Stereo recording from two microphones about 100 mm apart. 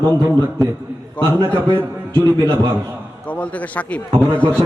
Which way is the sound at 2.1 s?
40° right (ahead or behind).